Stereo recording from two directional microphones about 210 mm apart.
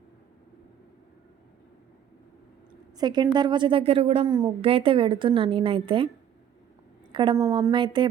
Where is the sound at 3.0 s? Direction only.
20° right (ahead or behind).